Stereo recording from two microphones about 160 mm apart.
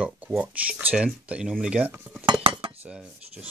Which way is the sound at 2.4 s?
35° right (ahead or behind).